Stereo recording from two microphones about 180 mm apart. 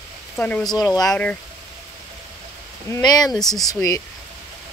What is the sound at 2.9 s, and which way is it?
Speech, 20° left (ahead or behind).